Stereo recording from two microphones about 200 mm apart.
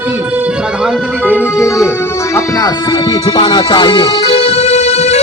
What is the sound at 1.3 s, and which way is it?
Speech, 10° right (ahead or behind).